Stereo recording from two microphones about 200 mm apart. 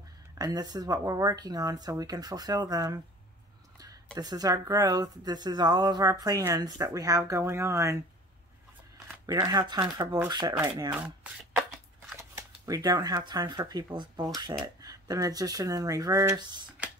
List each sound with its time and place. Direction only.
0.4 s speech: 20° right (ahead or behind)
9.2 s speech: 20° right (ahead or behind)
12.2 s speech: 15° right (ahead or behind)